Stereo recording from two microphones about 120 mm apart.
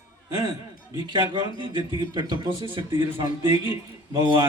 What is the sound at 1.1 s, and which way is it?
A man's voice, 40° right (ahead or behind).